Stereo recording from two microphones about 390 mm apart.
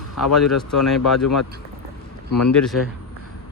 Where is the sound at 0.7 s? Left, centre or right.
Centre.